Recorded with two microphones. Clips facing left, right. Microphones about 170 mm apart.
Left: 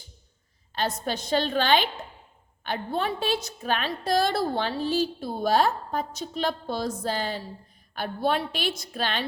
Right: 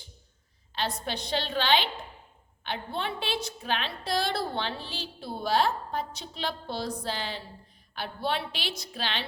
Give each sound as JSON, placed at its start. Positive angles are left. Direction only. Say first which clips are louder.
{"t": 0.8, "sound": "a woman's voice", "louder": "left 4 dB", "side_deg": 45}